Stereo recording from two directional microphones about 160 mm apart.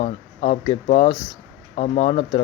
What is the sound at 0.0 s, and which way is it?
Speech, 40° left (ahead or behind).